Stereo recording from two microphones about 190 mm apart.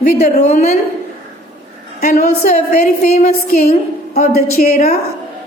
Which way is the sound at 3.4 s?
50° left (ahead or behind).